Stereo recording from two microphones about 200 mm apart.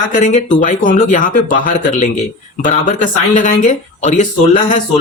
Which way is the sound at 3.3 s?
40° left (ahead or behind).